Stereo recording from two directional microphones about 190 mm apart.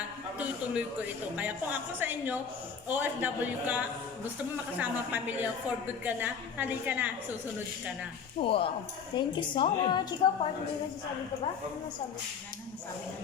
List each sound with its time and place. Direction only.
0.3 s a sound: 5° right (ahead or behind)
1.4 s a woman's voice: 10° right (ahead or behind)
8.4 s a woman's voice: 30° left (ahead or behind)